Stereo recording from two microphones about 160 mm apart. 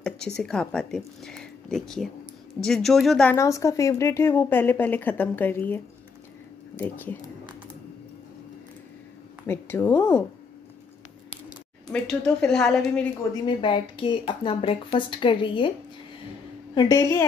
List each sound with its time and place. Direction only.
0.4 s speech: 5° left (ahead or behind)
3.3 s a woman's voice: 20° left (ahead or behind)
9.5 s a woman's voice: 15° left (ahead or behind)
11.9 s speech: 5° left (ahead or behind)
13.3 s speech: 30° left (ahead or behind)
16.7 s a woman's voice: 20° left (ahead or behind)